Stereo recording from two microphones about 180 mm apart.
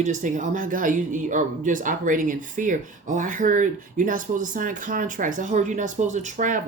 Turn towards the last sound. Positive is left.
turn(degrees=-45)  # may be behind; listen again after turning